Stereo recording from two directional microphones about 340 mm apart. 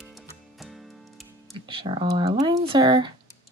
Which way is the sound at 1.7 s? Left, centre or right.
Centre.